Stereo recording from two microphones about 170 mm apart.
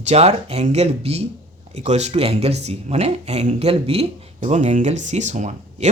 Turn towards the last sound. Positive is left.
turn(degrees=-45)  # may be behind; listen again after turning